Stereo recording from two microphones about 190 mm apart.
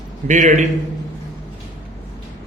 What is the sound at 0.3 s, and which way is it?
Speech, 40° right (ahead or behind).